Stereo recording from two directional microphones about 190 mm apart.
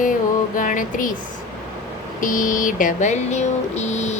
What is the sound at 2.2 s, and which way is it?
A woman's voice, 45° left (ahead or behind).